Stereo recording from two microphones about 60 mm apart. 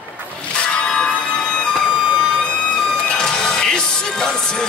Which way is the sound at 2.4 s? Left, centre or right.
Centre.